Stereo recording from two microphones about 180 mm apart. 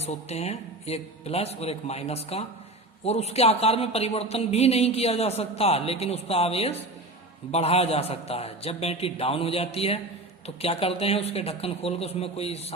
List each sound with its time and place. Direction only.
0.0 s a man's voice: 35° left (ahead or behind)